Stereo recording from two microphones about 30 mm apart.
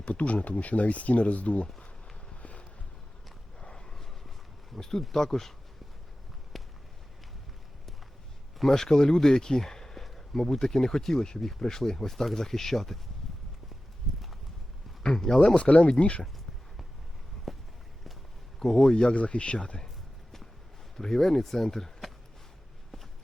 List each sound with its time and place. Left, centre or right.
0.1 s speech: left
2.3 s boat: left
3.6 s a sound: left
4.8 s speech: centre
6.5 s run: centre
8.7 s speech: left
10.0 s a sound: centre
10.6 s speech: centre
15.0 s speech: centre
15.5 s speech: left
18.6 s speech: centre
19.1 s speech: left
20.9 s speech: centre